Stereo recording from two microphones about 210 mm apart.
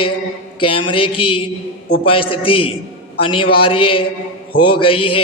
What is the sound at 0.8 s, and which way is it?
A man's voice, 25° left (ahead or behind).